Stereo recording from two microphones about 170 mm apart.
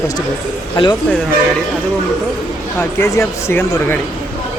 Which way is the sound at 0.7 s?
25° left (ahead or behind).